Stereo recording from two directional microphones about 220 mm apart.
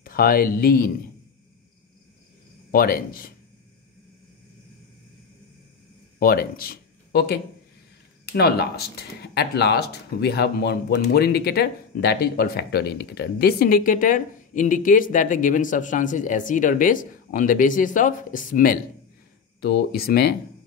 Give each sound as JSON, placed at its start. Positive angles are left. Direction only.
{"t": 0.0, "sound": "speech", "side_deg": 40}
{"t": 2.7, "sound": "speech", "side_deg": 40}
{"t": 6.1, "sound": "speech", "side_deg": 40}